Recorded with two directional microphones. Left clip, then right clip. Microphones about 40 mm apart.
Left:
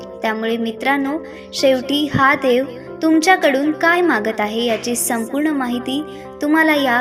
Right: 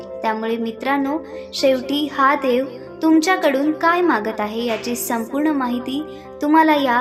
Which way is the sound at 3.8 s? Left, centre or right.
Left.